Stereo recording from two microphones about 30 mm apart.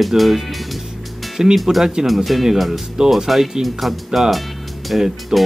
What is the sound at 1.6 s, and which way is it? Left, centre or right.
Speech, centre.